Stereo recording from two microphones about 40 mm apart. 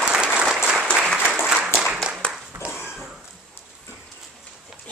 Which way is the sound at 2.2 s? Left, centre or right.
Left.